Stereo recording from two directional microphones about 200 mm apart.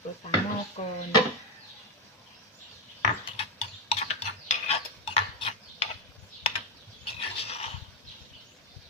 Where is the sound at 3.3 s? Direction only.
30° left (ahead or behind).